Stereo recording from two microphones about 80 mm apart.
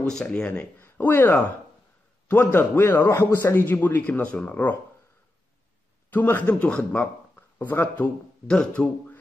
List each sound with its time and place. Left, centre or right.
0.1 s speech: centre
0.7 s speech: left
6.0 s a man's voice: left
8.5 s speech: centre